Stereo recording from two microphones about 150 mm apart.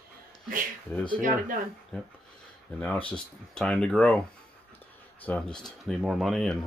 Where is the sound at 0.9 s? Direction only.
10° left (ahead or behind).